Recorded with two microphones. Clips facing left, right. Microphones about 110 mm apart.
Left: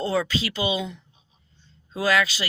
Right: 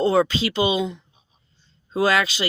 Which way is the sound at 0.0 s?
25° right (ahead or behind).